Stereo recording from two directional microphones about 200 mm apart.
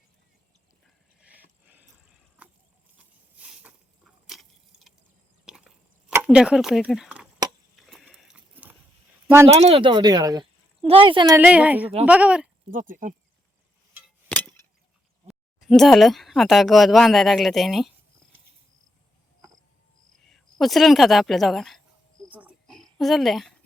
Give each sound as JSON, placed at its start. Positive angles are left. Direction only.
{"t": 1.2, "sound": "a sound", "side_deg": -10}
{"t": 9.5, "sound": "speech", "side_deg": -30}
{"t": 11.3, "sound": "a woman's voice", "side_deg": -5}
{"t": 12.7, "sound": "speech", "side_deg": -40}
{"t": 14.3, "sound": "a sound", "side_deg": 10}
{"t": 15.3, "sound": "speech", "side_deg": 0}
{"t": 20.3, "sound": "speech", "side_deg": 0}
{"t": 22.3, "sound": "cricket", "side_deg": -5}